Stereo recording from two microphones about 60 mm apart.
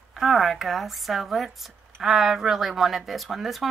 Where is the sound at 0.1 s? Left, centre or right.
Centre.